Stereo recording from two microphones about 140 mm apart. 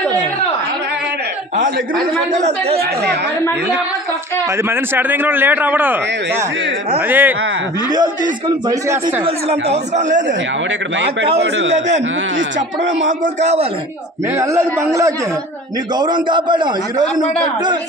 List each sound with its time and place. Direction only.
2.3 s speech: 55° right (ahead or behind)
4.6 s a man's voice: 15° right (ahead or behind)
7.9 s a man's voice: 30° right (ahead or behind)
8.8 s a man's voice: 20° right (ahead or behind)
9.2 s speech: 50° right (ahead or behind)
13.2 s speech: 55° right (ahead or behind)
14.3 s a man's voice: 20° right (ahead or behind)
16.0 s a man's voice: 35° right (ahead or behind)